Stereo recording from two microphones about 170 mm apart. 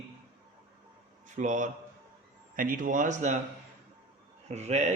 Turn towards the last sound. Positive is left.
turn(degrees=-40)  # may be behind; listen again after turning